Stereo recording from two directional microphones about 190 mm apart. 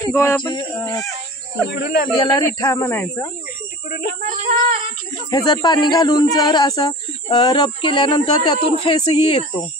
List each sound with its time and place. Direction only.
0.0 s speech: 15° left (ahead or behind)
1.7 s speech: 60° left (ahead or behind)
2.1 s speech: 25° left (ahead or behind)
2.7 s speech: 10° left (ahead or behind)
4.2 s speech: 45° right (ahead or behind)
5.3 s speech: 20° left (ahead or behind)